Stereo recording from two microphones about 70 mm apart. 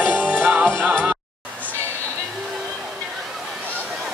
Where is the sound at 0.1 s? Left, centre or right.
Centre.